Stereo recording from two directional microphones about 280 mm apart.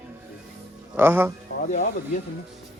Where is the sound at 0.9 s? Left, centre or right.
Centre.